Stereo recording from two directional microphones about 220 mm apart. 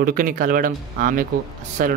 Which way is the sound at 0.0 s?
40° right (ahead or behind).